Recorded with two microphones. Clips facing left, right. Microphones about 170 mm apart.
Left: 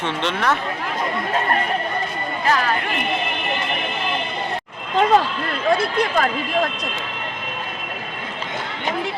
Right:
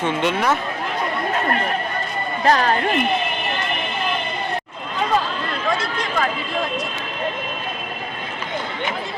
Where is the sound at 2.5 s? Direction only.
40° right (ahead or behind).